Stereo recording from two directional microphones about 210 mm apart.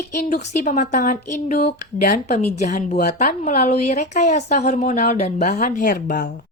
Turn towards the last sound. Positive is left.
turn(degrees=40)  # may be behind; listen again after turning